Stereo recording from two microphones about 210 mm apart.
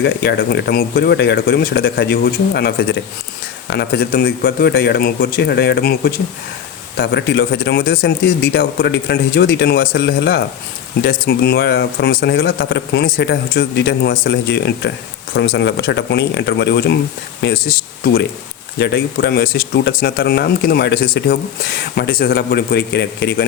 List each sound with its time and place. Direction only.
0.0 s speech: 55° left (ahead or behind)